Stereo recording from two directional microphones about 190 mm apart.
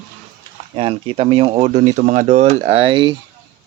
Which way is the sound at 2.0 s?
40° right (ahead or behind).